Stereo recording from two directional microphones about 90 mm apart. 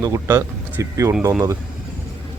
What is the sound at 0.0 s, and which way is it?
Speech, 35° right (ahead or behind).